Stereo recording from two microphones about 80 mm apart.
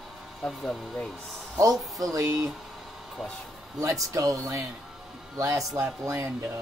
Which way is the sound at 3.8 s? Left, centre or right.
Right.